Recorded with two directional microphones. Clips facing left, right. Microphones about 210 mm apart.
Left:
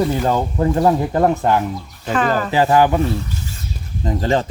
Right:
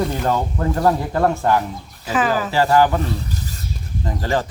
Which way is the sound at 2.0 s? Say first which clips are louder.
Left 1 dB; 5° right (ahead or behind).